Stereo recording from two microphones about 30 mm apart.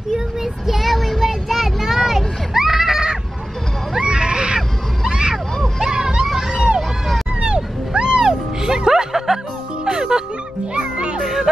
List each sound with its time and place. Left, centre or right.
0.1 s child singing: centre
4.0 s screaming: right
5.8 s hubbub: right
6.2 s a sound: centre
7.3 s a sound: right
8.2 s music: centre
10.7 s music: right
11.1 s music: centre